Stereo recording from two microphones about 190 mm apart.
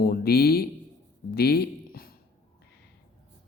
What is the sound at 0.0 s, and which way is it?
Speech, 50° left (ahead or behind).